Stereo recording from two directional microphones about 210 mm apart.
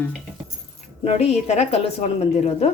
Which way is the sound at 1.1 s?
30° left (ahead or behind).